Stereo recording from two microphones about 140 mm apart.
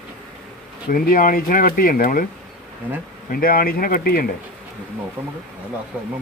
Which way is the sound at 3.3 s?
90° left.